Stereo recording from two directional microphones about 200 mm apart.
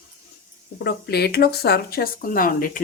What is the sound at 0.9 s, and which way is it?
Speech, 55° left (ahead or behind).